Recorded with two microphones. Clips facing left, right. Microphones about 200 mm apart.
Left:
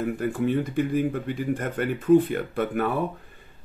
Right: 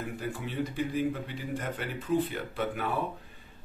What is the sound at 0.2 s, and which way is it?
Speech, 55° left (ahead or behind).